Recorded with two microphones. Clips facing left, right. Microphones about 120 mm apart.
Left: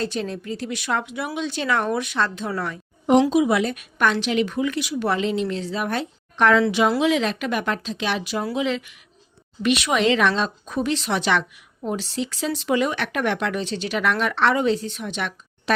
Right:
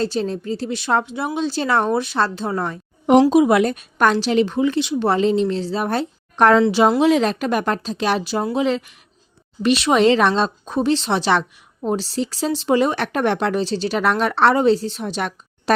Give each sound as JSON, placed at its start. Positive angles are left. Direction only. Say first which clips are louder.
{"t": 0.0, "sound": "a woman's voice", "louder": "right 5 dB", "side_deg": -35}
{"t": 3.1, "sound": "speech", "louder": "right 4 dB", "side_deg": -50}
{"t": 3.8, "sound": "a woman's voice", "louder": "right 4 dB", "side_deg": -40}